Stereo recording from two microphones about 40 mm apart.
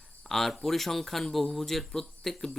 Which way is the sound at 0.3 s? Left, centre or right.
Centre.